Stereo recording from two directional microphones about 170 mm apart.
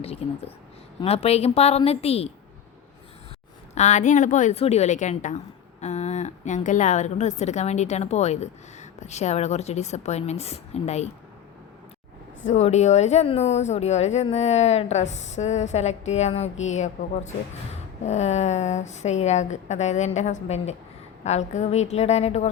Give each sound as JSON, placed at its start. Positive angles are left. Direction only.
{"t": 0.0, "sound": "a woman's voice", "side_deg": 35}
{"t": 3.8, "sound": "a woman's voice", "side_deg": 45}
{"t": 12.4, "sound": "a woman's voice", "side_deg": 45}